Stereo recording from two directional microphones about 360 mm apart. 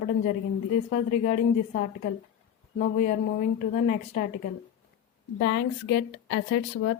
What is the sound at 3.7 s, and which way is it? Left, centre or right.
Speech, left.